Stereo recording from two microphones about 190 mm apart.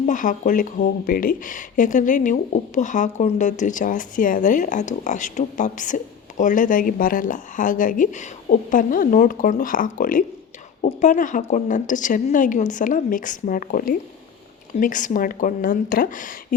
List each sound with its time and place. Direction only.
0.0 s speech: 40° left (ahead or behind)